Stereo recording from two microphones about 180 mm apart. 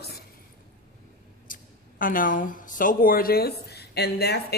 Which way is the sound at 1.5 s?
50° left (ahead or behind).